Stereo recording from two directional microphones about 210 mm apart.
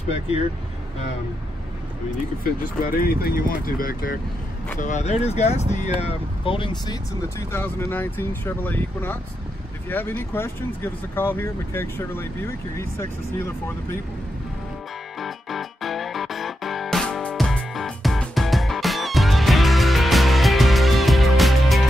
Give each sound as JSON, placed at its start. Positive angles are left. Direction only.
{"t": 2.8, "sound": "speech", "side_deg": 45}
{"t": 15.1, "sound": "music", "side_deg": 0}